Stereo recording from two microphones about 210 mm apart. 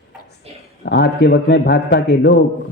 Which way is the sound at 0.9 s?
50° left (ahead or behind).